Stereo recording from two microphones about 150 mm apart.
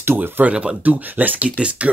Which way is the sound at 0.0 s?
15° right (ahead or behind).